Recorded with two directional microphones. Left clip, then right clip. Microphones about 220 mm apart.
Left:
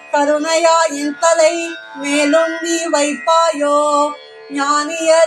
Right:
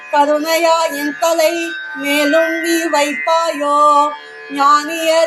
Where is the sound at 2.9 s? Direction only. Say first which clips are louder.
Left 3 dB; 15° right (ahead or behind).